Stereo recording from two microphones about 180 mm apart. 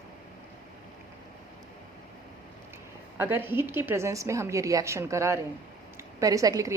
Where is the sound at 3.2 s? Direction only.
10° right (ahead or behind).